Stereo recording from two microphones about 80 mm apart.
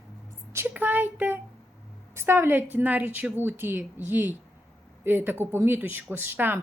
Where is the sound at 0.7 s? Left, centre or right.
Right.